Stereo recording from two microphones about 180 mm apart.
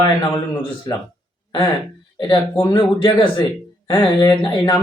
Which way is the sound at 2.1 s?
25° left (ahead or behind).